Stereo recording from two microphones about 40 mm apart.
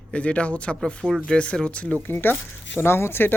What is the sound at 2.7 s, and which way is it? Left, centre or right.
Speech, left.